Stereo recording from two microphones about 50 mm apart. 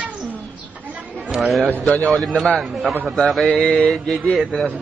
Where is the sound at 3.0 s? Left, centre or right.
Centre.